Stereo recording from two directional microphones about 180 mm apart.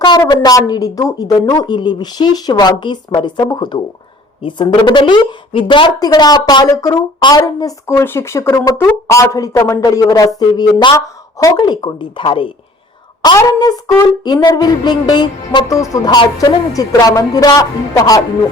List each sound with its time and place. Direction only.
0.0 s a woman's voice: 25° left (ahead or behind)